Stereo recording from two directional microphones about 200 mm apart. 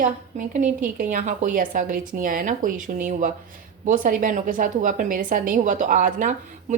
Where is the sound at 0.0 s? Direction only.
40° right (ahead or behind).